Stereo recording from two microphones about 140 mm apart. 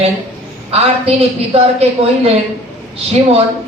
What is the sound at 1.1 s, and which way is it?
A woman's voice, 45° right (ahead or behind).